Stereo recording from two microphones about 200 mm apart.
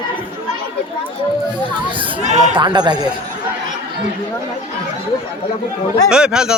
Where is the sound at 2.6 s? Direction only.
20° right (ahead or behind).